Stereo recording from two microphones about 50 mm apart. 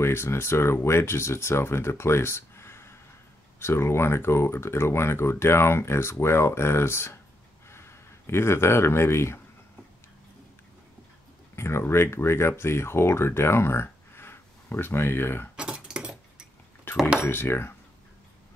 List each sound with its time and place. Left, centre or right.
0.0 s speech: left
11.5 s speech: left
15.5 s a sound: centre
17.2 s speech: left